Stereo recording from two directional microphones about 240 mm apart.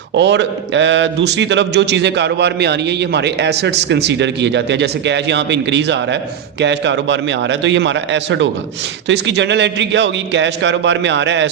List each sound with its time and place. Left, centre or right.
0.2 s a man's voice: right